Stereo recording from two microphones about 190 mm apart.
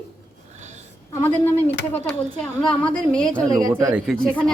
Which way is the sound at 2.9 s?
5° left (ahead or behind).